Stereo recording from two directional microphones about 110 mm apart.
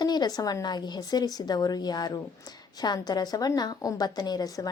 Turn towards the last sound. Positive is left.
turn(degrees=35)  # may be behind; listen again after turning